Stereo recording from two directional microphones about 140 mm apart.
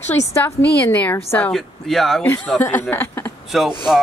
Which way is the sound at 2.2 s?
15° left (ahead or behind).